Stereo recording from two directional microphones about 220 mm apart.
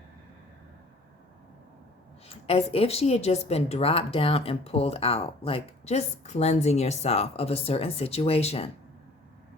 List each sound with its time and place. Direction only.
2.2 s a woman's voice: 25° left (ahead or behind)